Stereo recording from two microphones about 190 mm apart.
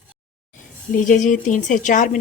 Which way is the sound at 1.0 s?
40° left (ahead or behind).